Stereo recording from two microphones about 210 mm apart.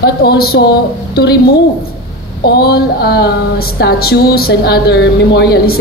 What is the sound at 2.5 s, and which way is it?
A woman's voice, 50° left (ahead or behind).